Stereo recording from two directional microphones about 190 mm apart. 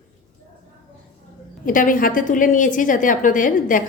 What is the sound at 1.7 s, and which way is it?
A woman's voice, 45° left (ahead or behind).